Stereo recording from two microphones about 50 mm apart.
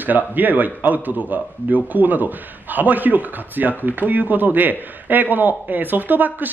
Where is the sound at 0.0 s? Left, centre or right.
Right.